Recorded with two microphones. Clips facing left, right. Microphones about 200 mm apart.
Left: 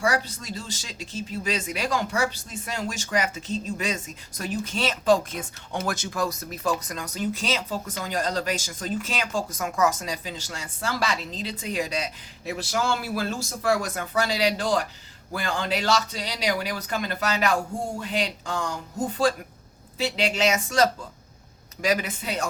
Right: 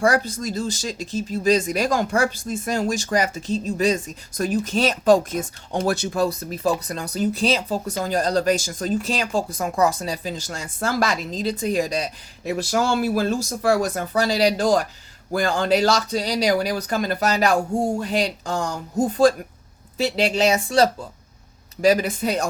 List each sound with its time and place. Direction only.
0.0 s speech: 45° right (ahead or behind)